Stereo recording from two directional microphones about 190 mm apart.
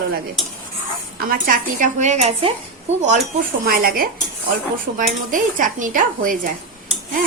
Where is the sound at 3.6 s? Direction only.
50° right (ahead or behind).